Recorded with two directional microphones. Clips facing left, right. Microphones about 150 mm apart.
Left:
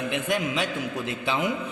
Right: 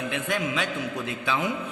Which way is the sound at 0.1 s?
20° left (ahead or behind).